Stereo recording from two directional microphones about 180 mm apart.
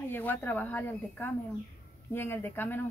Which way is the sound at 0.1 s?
10° left (ahead or behind).